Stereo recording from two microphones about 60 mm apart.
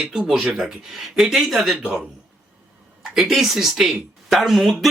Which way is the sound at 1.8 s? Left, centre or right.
Centre.